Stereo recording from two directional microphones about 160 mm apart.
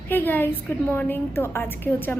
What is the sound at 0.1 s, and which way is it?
Speech, 10° left (ahead or behind).